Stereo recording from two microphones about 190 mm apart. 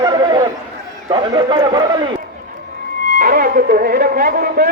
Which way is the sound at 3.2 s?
50° right (ahead or behind).